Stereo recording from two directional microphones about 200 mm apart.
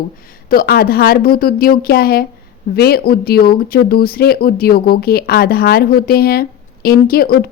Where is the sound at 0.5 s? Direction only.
50° left (ahead or behind).